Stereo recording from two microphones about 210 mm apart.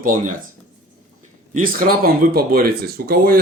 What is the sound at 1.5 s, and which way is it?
Speech, 40° right (ahead or behind).